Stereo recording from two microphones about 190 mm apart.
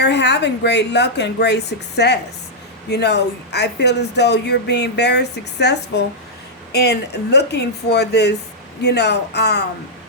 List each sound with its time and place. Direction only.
0.0 s speech: 65° left (ahead or behind)